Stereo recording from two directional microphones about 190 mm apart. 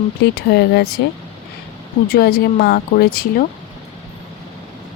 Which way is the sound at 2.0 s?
55° left (ahead or behind).